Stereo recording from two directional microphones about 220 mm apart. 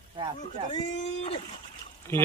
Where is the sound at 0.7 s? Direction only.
35° left (ahead or behind).